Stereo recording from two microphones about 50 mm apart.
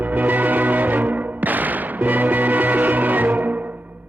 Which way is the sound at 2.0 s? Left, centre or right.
Right.